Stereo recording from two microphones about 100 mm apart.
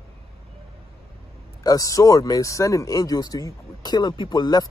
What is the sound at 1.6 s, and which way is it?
A man's voice, 40° left (ahead or behind).